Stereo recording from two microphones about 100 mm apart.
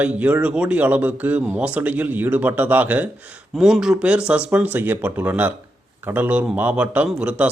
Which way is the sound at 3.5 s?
5° right (ahead or behind).